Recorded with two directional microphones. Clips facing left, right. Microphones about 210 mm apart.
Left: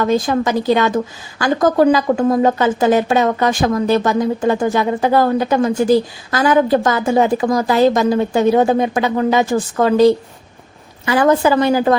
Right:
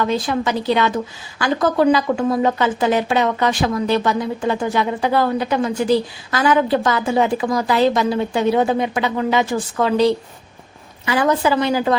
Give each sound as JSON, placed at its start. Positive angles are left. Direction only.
{"t": 0.0, "sound": "a woman's voice", "side_deg": 45}